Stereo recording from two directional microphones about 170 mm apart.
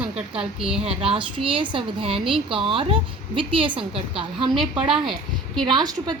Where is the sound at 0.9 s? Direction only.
35° right (ahead or behind).